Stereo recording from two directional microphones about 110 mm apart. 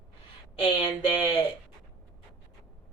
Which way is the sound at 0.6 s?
50° left (ahead or behind).